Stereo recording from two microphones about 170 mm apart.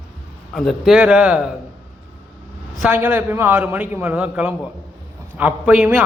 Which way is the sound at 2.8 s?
10° right (ahead or behind).